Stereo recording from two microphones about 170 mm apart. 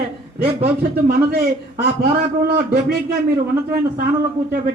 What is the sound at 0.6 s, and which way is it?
Speech, 65° right (ahead or behind).